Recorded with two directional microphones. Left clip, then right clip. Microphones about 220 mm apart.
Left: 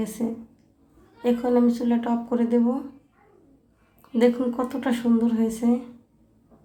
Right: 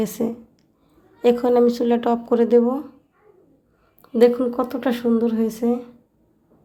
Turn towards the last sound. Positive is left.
turn(degrees=-20)  # may be behind; listen again after turning